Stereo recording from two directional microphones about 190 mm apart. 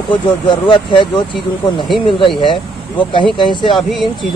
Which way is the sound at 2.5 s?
25° left (ahead or behind).